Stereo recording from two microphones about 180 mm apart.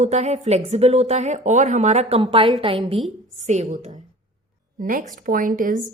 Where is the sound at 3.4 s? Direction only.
40° right (ahead or behind).